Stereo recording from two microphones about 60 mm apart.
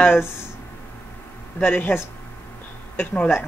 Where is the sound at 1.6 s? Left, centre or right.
Left.